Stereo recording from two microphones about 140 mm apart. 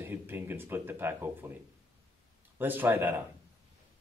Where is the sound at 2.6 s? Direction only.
15° right (ahead or behind).